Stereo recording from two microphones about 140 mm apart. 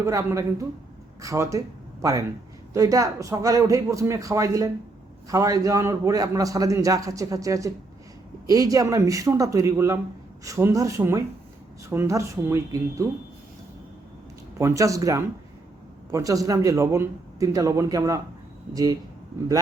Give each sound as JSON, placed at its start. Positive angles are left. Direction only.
{"t": 0.0, "sound": "a man's voice", "side_deg": -20}
{"t": 14.6, "sound": "a man's voice", "side_deg": -20}